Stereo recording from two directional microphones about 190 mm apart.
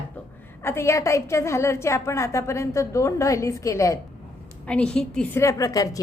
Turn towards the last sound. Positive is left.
turn(degrees=20)  # may be behind; listen again after turning